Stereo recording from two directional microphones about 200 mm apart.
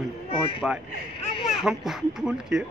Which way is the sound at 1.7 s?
Centre (ahead or behind).